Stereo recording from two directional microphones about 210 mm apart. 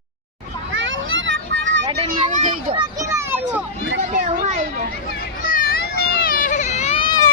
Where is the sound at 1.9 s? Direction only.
30° right (ahead or behind).